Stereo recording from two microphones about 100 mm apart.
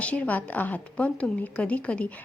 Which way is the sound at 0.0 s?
15° left (ahead or behind).